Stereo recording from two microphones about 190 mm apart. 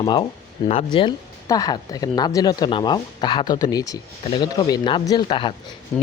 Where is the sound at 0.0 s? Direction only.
20° left (ahead or behind).